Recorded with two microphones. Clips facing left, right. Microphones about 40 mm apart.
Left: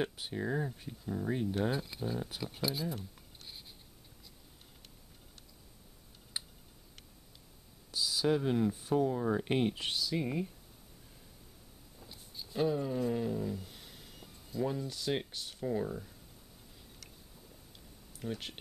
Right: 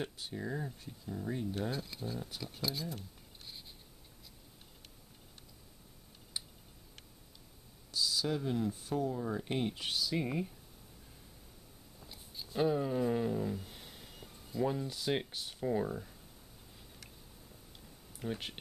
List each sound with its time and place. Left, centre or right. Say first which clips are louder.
0.0 s speech: left 4 dB; left
2.3 s writing: left 3 dB; centre
7.9 s speech: left 4 dB; centre
9.7 s speech: left 3 dB; centre
9.9 s speech: even; centre
12.0 s speech: even; centre
18.2 s speech: even; centre